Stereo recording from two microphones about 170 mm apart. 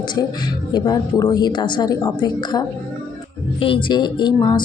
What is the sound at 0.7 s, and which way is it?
A woman's voice, 25° left (ahead or behind).